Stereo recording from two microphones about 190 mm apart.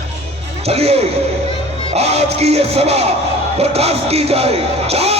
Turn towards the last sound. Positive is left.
turn(degrees=-30)  # may be behind; listen again after turning